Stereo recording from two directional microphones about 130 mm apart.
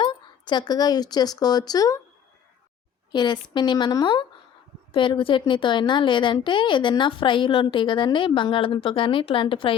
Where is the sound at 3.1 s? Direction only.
35° left (ahead or behind).